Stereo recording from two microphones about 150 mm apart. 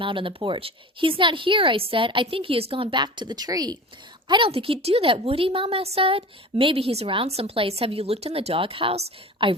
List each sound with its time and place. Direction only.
0.0 s a woman's voice: 35° right (ahead or behind)